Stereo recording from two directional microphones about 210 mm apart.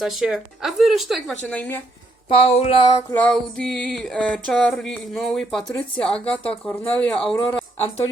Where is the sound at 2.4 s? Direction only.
30° left (ahead or behind).